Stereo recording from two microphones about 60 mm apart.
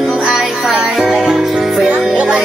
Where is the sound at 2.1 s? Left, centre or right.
Right.